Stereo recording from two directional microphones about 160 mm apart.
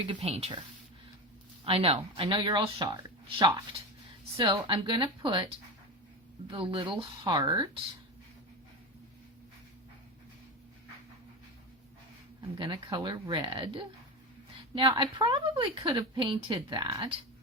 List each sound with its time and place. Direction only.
0.0 s speech: 35° right (ahead or behind)
1.6 s speech: 35° right (ahead or behind)
12.4 s speech: 30° right (ahead or behind)